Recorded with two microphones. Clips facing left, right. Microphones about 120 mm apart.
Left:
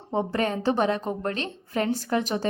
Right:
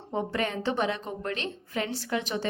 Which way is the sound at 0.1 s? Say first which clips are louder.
Left 4 dB; 30° left (ahead or behind).